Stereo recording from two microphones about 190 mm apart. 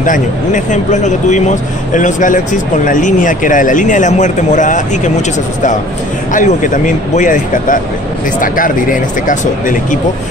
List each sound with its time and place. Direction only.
0.0 s speech: 40° left (ahead or behind)
6.3 s speech: 45° left (ahead or behind)